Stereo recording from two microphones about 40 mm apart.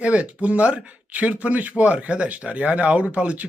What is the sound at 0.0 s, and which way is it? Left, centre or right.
A man's voice, right.